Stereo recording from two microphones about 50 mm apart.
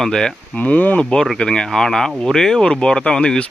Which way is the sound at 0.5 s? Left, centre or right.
Left.